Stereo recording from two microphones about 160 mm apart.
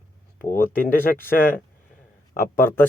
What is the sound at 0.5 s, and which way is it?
Speech, 60° left (ahead or behind).